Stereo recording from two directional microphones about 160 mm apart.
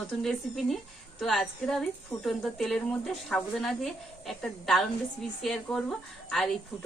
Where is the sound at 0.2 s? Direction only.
Centre (ahead or behind).